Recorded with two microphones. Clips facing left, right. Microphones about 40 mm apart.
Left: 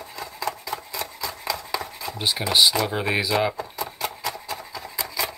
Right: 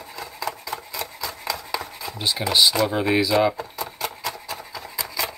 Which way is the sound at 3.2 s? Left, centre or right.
Centre.